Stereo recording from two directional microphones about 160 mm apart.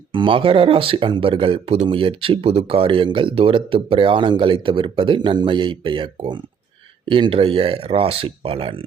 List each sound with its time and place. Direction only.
0.1 s speech: 30° right (ahead or behind)